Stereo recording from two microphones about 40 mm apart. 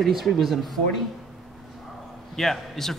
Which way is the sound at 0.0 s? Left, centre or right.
Centre.